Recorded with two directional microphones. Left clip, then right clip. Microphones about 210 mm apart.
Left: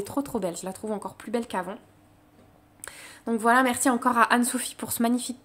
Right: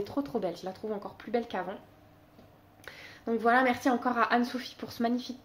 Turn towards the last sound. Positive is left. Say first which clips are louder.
# left 5 dB
turn(degrees=40)  # may be behind; listen again after turning